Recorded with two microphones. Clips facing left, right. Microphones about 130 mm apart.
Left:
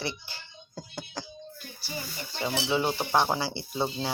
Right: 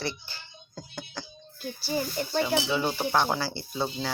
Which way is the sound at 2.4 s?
25° left (ahead or behind).